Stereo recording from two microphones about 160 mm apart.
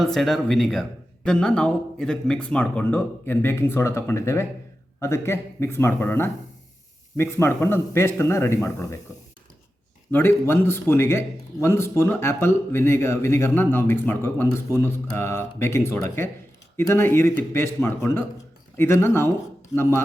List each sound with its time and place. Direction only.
0.0 s a man's voice: centre (ahead or behind)
10.1 s a man's voice: 15° left (ahead or behind)